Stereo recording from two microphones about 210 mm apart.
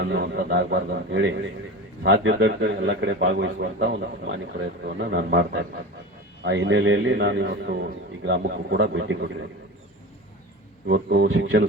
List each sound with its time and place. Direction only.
0.0 s a man's voice: 50° right (ahead or behind)
4.9 s a man's voice: 55° right (ahead or behind)
10.8 s a man's voice: 50° right (ahead or behind)